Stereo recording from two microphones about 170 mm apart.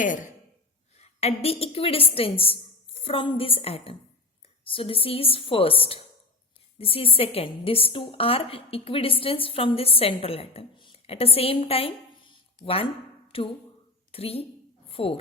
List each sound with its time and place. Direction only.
0.9 s a woman's voice: 40° left (ahead or behind)
12.3 s a sound: 30° left (ahead or behind)
13.3 s a woman's voice: 30° left (ahead or behind)